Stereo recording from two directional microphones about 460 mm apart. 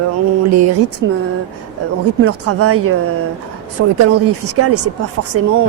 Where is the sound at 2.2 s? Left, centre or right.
Right.